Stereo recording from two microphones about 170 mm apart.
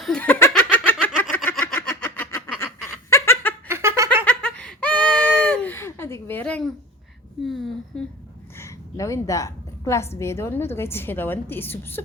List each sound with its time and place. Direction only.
0.0 s giggle: 5° left (ahead or behind)
1.0 s a sound: 10° left (ahead or behind)
2.8 s laughter: 15° left (ahead or behind)
3.7 s giggle: 15° right (ahead or behind)
4.3 s baby cry: 5° left (ahead or behind)
7.4 s a sound: centre (ahead or behind)
8.5 s a woman's voice: 15° left (ahead or behind)